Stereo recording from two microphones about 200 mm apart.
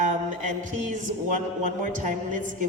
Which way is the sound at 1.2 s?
40° right (ahead or behind).